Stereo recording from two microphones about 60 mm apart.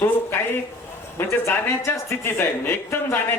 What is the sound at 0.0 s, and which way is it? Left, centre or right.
Speech, left.